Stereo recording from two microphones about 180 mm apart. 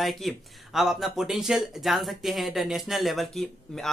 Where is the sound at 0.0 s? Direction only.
Centre (ahead or behind).